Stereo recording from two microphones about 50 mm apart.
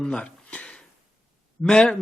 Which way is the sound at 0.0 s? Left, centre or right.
Centre.